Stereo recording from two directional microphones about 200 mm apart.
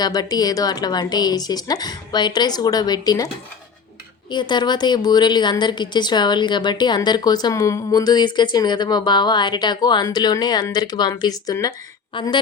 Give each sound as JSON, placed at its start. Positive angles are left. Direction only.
{"t": 0.0, "sound": "a woman's voice", "side_deg": 20}
{"t": 4.3, "sound": "a woman's voice", "side_deg": 20}